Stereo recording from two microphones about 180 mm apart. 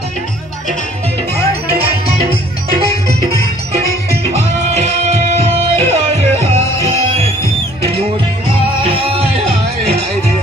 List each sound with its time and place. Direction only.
4.2 s music: 35° right (ahead or behind)
8.8 s music: 30° right (ahead or behind)